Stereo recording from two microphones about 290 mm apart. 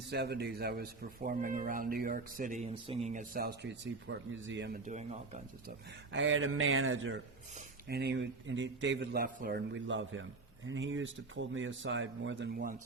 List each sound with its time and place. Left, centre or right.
0.1 s a man's voice: right
2.6 s a man's voice: centre; by 4.8 s right
6.1 s a man's voice: right